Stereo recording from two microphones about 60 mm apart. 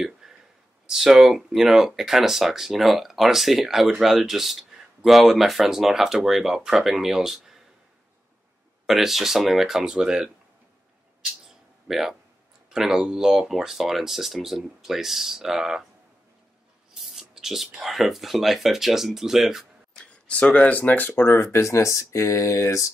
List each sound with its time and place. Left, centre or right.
0.8 s speech: centre
8.8 s speech: centre
11.9 s speech: centre
17.0 s speech: centre
20.2 s speech: centre
21.3 s speech: left